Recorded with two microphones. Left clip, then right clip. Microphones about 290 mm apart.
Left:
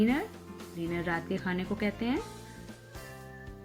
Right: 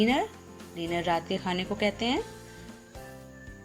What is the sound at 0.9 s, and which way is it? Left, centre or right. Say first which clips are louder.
A woman's voice: right 6 dB; centre.